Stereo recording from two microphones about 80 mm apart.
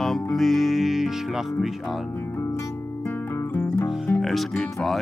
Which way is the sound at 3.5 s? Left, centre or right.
Left.